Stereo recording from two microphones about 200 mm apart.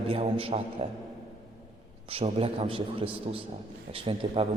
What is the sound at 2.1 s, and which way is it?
A man's voice, 30° right (ahead or behind).